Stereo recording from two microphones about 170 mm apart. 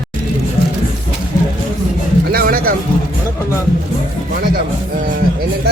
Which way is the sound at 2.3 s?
60° right (ahead or behind).